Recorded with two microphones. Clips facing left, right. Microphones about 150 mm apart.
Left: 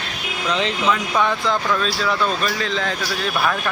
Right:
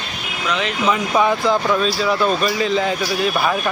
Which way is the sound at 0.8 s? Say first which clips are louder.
Right 4 dB; 5° right (ahead or behind).